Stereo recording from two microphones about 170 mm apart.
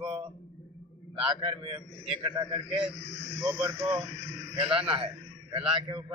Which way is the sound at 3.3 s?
15° right (ahead or behind).